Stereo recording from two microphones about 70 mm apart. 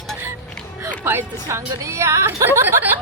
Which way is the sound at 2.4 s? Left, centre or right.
Right.